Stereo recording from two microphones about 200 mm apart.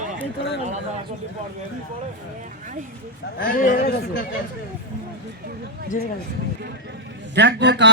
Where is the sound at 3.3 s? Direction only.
45° left (ahead or behind).